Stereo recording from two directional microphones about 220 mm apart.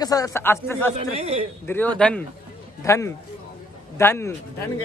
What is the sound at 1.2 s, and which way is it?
Speech, 25° right (ahead or behind).